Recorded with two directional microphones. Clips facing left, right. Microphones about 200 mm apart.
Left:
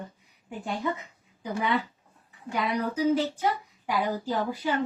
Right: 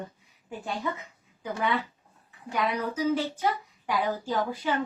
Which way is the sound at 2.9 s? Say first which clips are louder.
Left 2 dB; 10° left (ahead or behind).